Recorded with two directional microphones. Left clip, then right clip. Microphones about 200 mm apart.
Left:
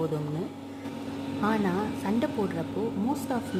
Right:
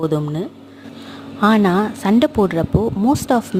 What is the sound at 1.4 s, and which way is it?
A woman's voice, 55° right (ahead or behind).